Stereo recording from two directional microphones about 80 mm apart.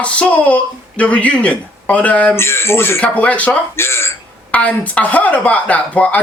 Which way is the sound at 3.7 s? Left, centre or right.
Left.